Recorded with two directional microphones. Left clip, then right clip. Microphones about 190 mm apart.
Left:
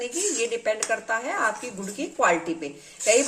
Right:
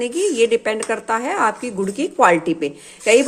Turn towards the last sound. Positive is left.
turn(degrees=-45)  # may be behind; listen again after turning